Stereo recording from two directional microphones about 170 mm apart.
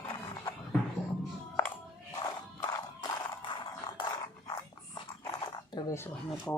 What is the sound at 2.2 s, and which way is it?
Horse, 25° left (ahead or behind).